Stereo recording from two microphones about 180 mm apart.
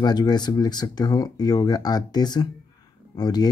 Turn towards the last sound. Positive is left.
turn(degrees=20)  # may be behind; listen again after turning